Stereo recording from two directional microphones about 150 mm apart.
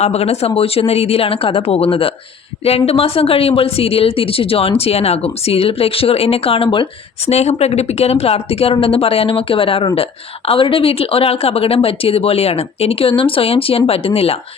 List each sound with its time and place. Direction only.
0.0 s speech: 45° left (ahead or behind)